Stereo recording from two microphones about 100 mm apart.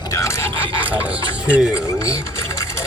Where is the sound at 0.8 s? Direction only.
15° right (ahead or behind).